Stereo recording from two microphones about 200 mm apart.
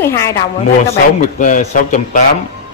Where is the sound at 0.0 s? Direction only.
15° left (ahead or behind).